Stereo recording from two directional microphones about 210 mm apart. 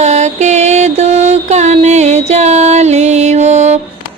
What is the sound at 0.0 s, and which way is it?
Mantra, 35° right (ahead or behind).